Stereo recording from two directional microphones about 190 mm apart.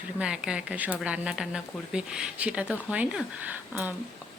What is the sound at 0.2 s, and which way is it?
Speech, 5° right (ahead or behind).